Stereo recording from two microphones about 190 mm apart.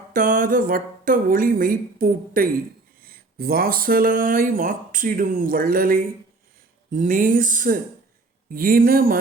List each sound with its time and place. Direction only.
0.1 s speech: 45° right (ahead or behind)